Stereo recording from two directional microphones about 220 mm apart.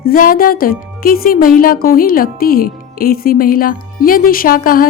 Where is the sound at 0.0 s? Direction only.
40° left (ahead or behind).